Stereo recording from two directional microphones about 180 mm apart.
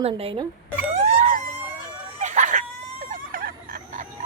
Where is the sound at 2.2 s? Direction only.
40° right (ahead or behind).